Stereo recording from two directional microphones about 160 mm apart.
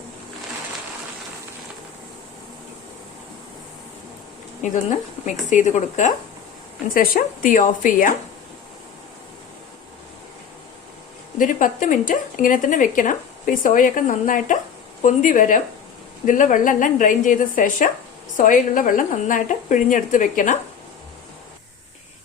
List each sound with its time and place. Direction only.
4.6 s speech: 50° left (ahead or behind)
6.9 s speech: 65° left (ahead or behind)
11.3 s speech: 55° left (ahead or behind)